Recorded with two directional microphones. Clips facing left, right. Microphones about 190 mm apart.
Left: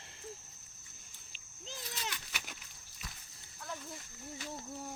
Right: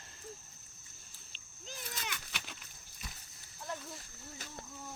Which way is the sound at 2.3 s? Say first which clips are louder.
Even; 5° left (ahead or behind).